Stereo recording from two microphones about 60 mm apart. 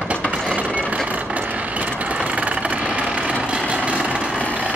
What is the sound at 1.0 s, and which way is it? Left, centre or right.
Vehicle, right.